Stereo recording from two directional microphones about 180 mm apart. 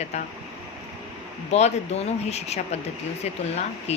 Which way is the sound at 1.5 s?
35° left (ahead or behind).